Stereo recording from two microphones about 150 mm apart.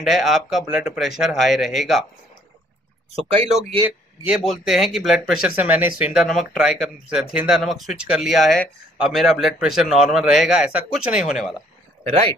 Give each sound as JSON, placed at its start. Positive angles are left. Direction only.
{"t": 0.0, "sound": "speech", "side_deg": 0}
{"t": 3.2, "sound": "speech", "side_deg": -40}
{"t": 3.8, "sound": "speech", "side_deg": -15}
{"t": 4.5, "sound": "speech", "side_deg": 0}
{"t": 12.0, "sound": "speech", "side_deg": -40}